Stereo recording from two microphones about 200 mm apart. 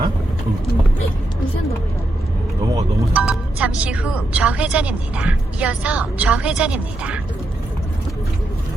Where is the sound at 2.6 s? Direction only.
15° right (ahead or behind).